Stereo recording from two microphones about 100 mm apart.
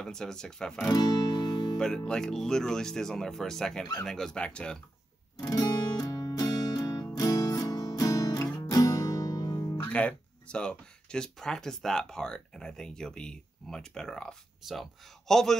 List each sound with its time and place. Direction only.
0.0 s speech: 5° left (ahead or behind)
0.9 s music: 40° left (ahead or behind)
1.8 s speech: 5° left (ahead or behind)
5.4 s music: 35° left (ahead or behind)
7.2 s guitar: 35° left (ahead or behind)
9.8 s speech: 15° left (ahead or behind)